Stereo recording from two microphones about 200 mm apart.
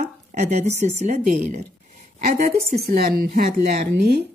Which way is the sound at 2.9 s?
50° right (ahead or behind).